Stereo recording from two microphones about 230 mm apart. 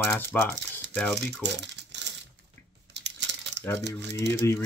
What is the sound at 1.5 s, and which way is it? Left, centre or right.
Crumpling, right.